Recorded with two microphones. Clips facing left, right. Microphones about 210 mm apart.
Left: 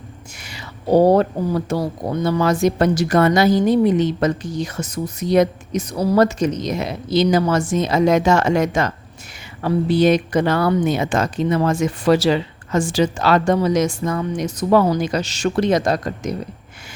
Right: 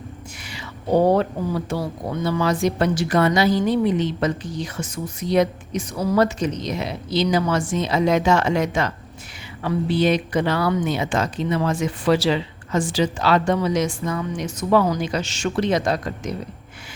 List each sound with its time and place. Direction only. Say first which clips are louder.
0.4 s speech: left 4 dB; 40° left (ahead or behind)